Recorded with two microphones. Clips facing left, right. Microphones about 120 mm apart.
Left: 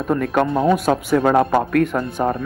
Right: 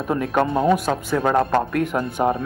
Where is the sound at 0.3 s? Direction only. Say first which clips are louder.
Even; centre (ahead or behind).